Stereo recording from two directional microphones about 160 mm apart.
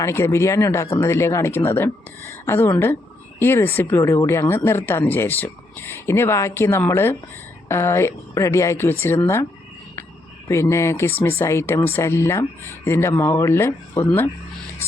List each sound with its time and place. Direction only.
0.0 s speech: 15° left (ahead or behind)
10.5 s speech: 15° left (ahead or behind)